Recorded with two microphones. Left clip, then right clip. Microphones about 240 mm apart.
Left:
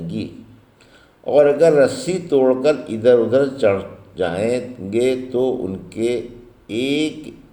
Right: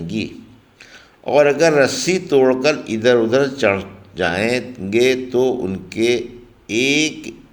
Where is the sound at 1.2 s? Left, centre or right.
Right.